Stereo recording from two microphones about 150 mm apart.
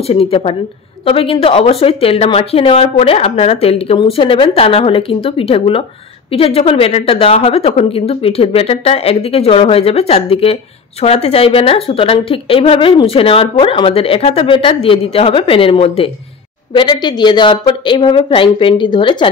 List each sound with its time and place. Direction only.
0.0 s a woman's voice: 40° left (ahead or behind)